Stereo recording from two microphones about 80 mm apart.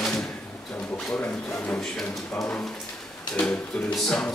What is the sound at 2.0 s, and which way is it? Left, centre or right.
A man's voice, centre.